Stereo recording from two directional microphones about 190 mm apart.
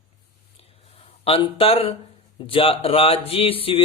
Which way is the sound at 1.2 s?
30° left (ahead or behind).